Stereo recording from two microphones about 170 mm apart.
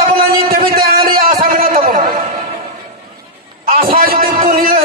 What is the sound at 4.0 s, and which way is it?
Music, 60° right (ahead or behind).